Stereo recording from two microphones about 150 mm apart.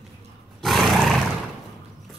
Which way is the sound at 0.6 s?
Centre (ahead or behind).